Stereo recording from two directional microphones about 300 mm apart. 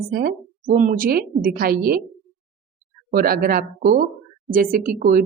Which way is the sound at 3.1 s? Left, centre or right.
Right.